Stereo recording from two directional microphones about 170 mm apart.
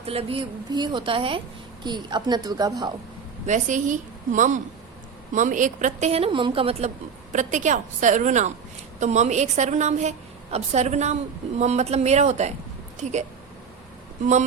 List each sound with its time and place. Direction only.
0.0 s a woman's voice: 35° right (ahead or behind)
3.4 s a woman's voice: 45° right (ahead or behind)